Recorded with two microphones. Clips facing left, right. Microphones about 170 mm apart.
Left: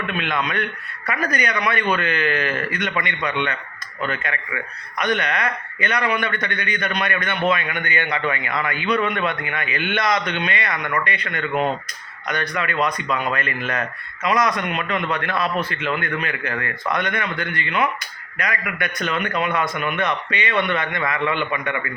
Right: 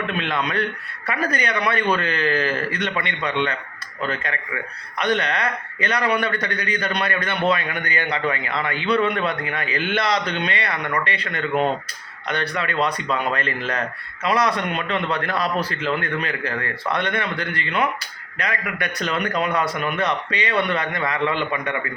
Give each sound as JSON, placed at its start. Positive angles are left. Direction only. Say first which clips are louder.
{"t": 0.1, "sound": "a man's voice", "louder": "even", "side_deg": -30}